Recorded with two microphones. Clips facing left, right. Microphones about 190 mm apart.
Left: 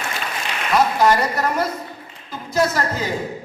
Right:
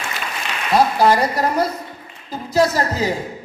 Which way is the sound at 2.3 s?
35° right (ahead or behind).